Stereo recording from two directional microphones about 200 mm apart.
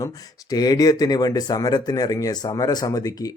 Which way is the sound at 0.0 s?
20° left (ahead or behind).